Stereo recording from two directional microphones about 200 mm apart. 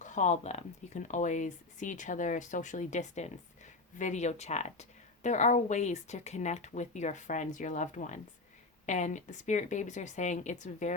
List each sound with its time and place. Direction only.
0.0 s a woman's voice: 40° left (ahead or behind)